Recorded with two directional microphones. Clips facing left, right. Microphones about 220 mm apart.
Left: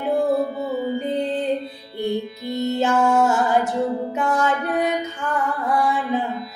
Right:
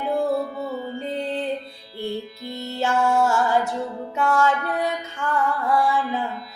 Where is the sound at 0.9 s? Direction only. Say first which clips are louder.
Left 4 dB; 20° left (ahead or behind).